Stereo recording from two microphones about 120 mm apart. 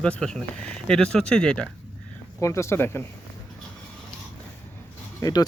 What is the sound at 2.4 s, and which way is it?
Speech, 25° left (ahead or behind).